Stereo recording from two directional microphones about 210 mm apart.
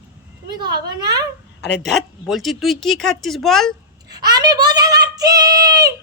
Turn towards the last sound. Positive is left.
turn(degrees=-15)  # may be behind; listen again after turning